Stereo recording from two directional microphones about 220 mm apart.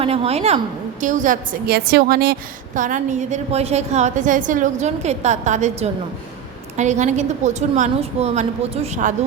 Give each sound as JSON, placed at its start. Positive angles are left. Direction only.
{"t": 0.0, "sound": "a woman's voice", "side_deg": -25}